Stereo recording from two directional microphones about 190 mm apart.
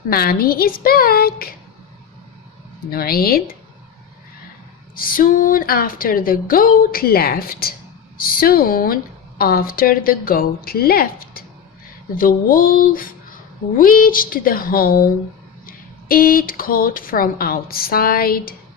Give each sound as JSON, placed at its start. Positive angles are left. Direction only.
{"t": 0.1, "sound": "speech", "side_deg": 50}
{"t": 2.9, "sound": "speech", "side_deg": 55}
{"t": 4.9, "sound": "speech", "side_deg": 50}